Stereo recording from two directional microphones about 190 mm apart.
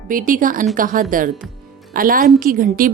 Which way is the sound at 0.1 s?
45° right (ahead or behind).